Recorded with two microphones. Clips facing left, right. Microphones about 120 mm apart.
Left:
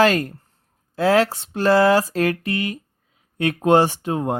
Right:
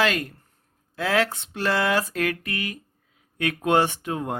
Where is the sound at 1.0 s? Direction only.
35° left (ahead or behind).